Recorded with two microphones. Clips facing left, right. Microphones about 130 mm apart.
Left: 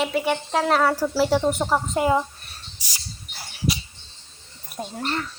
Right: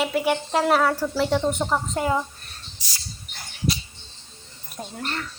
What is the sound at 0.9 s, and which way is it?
A woman's voice, 5° left (ahead or behind).